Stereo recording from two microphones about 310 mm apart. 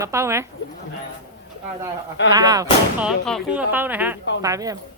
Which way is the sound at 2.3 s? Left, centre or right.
Centre.